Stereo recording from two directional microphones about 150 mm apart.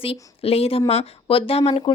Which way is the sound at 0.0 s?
40° left (ahead or behind).